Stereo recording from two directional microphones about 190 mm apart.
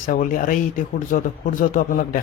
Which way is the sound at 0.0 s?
45° left (ahead or behind).